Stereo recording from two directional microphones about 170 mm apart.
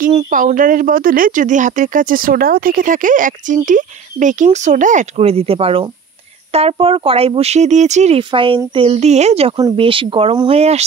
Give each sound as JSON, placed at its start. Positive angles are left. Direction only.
{"t": 0.0, "sound": "speech", "side_deg": -50}
{"t": 8.2, "sound": "speech", "side_deg": -30}